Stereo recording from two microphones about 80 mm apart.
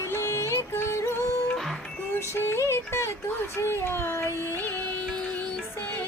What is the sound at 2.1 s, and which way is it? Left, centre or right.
Music, left.